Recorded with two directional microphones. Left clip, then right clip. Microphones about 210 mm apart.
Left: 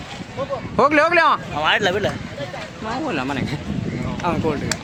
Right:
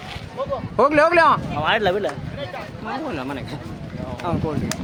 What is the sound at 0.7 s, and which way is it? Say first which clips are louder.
Speech: even; 35° left (ahead or behind).